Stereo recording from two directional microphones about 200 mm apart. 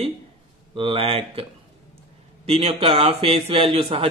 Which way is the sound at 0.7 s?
30° right (ahead or behind).